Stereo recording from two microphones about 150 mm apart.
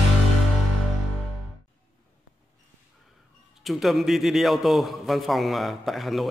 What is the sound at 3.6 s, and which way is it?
A man's voice, centre (ahead or behind).